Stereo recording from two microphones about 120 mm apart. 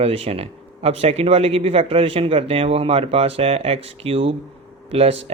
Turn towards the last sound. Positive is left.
turn(degrees=-55)  # may be behind; listen again after turning